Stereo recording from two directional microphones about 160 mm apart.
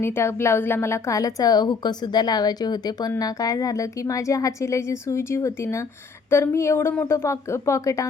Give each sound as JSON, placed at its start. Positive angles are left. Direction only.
{"t": 0.0, "sound": "a woman's voice", "side_deg": 15}